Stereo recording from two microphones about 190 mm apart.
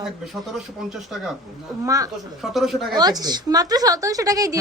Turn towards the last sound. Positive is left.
turn(degrees=-20)  # may be behind; listen again after turning